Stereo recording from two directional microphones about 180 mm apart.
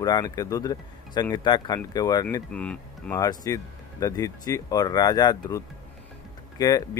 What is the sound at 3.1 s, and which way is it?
Speech, 20° left (ahead or behind).